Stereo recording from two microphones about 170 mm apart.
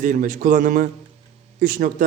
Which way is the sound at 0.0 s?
50° right (ahead or behind).